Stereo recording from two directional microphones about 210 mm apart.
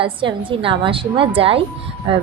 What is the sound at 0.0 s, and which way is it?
A woman's voice, 25° right (ahead or behind).